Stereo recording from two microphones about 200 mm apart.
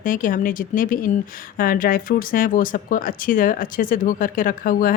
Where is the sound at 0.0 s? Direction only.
45° left (ahead or behind).